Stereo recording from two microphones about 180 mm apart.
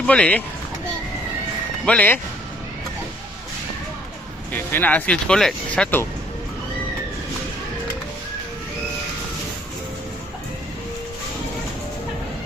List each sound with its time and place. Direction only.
0.0 s speech: 5° left (ahead or behind)
1.8 s speech: 5° left (ahead or behind)
4.5 s speech: 10° left (ahead or behind)